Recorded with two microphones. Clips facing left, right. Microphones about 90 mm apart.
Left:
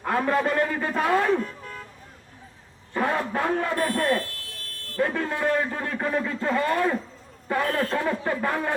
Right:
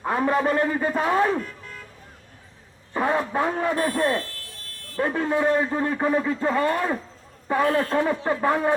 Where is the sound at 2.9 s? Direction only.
20° right (ahead or behind).